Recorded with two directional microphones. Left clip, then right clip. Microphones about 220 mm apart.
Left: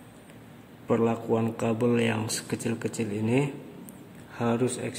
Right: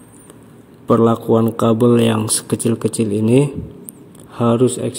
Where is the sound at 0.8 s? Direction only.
35° right (ahead or behind).